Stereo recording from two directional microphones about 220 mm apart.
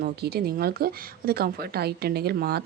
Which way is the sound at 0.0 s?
45° right (ahead or behind).